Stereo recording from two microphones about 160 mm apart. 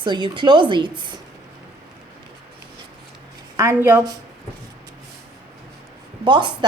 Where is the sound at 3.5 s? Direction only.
15° right (ahead or behind).